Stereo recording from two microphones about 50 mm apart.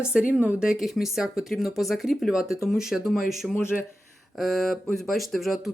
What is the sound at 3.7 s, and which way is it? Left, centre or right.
Speech, centre.